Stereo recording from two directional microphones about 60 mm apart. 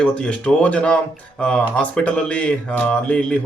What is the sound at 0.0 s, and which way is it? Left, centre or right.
Speech, centre.